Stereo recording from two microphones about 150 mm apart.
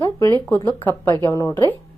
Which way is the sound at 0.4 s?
10° left (ahead or behind).